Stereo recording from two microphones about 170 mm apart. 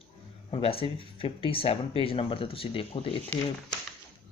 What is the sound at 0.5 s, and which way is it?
Speech, 35° left (ahead or behind).